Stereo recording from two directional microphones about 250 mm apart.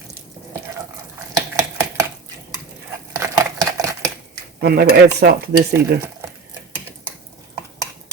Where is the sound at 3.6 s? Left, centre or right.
Centre.